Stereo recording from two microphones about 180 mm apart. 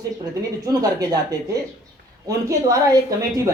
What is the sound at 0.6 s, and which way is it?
Speech, 20° right (ahead or behind).